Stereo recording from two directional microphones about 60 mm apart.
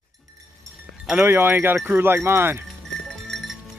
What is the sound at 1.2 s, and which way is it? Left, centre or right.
Speech, right.